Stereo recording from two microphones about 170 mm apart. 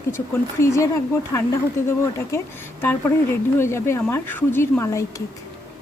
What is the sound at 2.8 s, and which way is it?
Speech, 15° left (ahead or behind).